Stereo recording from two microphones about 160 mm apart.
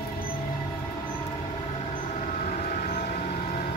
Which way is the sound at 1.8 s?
50° left (ahead or behind).